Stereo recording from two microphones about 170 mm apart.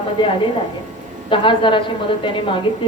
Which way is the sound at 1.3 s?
30° left (ahead or behind).